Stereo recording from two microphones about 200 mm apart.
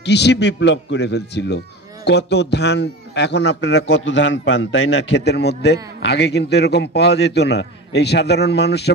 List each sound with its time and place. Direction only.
0.0 s a man's voice: 60° left (ahead or behind)